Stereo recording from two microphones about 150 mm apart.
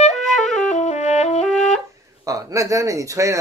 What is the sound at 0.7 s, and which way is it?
Music, 50° left (ahead or behind).